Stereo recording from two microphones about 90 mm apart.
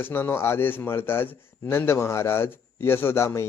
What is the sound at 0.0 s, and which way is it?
Speech, 25° left (ahead or behind).